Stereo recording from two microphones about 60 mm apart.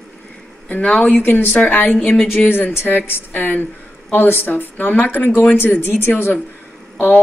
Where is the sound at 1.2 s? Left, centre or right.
Left.